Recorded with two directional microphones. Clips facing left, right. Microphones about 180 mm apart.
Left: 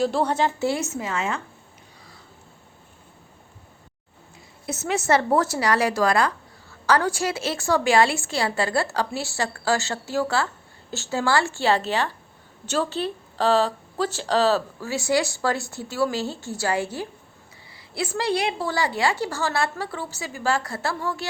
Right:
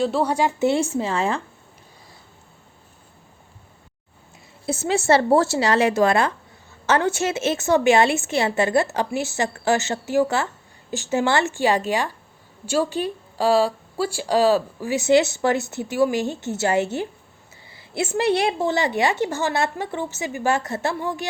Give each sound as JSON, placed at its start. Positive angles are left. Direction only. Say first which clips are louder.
{"t": 0.0, "sound": "speech", "louder": "right 1 dB", "side_deg": -5}
{"t": 0.7, "sound": "speech", "louder": "right 5 dB", "side_deg": -30}
{"t": 4.6, "sound": "a woman's voice", "louder": "right 4 dB", "side_deg": -30}